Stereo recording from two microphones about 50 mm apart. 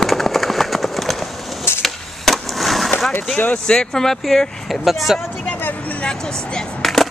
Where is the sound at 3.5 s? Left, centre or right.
Centre.